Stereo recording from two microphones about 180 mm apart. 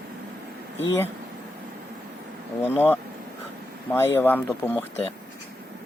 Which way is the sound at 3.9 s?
10° left (ahead or behind).